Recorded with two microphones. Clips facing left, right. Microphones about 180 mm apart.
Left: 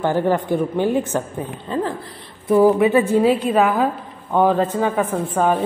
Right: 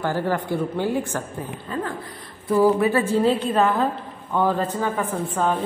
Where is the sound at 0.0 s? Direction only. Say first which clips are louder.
Left 5 dB; 20° left (ahead or behind).